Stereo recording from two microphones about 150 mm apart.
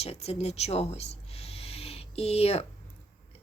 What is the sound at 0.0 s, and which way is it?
Speech, 45° left (ahead or behind).